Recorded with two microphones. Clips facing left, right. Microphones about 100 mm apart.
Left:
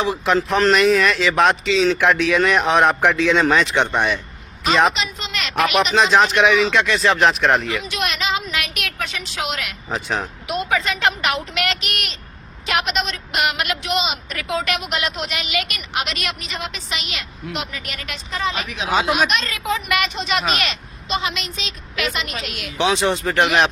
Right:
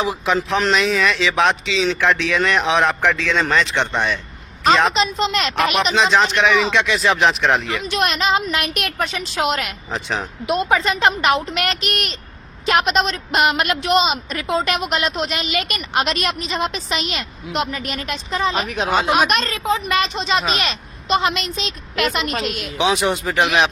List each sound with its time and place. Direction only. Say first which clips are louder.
0.0 s a man's voice: left 1 dB; centre (ahead or behind)
4.9 s a woman's voice: right 8 dB; 35° right (ahead or behind)
5.7 s speech: left 2 dB; 5° left (ahead or behind)
7.9 s a woman's voice: right 4 dB; 45° right (ahead or behind)
9.9 s speech: left 1 dB; centre (ahead or behind)
10.4 s a woman's voice: right 6 dB; 35° right (ahead or behind)
19.5 s a woman's voice: right 2 dB; 30° right (ahead or behind)
21.1 s a woman's voice: right 6 dB; 50° right (ahead or behind)
23.0 s speech: even; 10° right (ahead or behind)